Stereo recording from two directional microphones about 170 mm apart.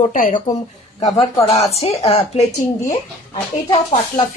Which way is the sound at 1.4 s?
35° left (ahead or behind).